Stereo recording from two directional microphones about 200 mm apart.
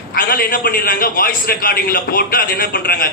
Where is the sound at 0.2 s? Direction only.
45° left (ahead or behind).